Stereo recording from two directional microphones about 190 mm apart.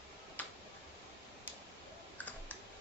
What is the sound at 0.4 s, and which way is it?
Tick-tock, 10° left (ahead or behind).